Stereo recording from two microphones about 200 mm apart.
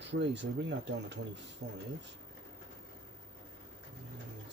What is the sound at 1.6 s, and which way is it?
Speech, 35° right (ahead or behind).